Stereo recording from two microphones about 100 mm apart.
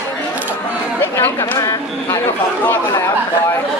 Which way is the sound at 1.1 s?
25° left (ahead or behind).